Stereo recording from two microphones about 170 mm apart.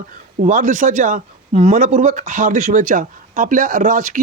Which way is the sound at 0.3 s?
45° right (ahead or behind).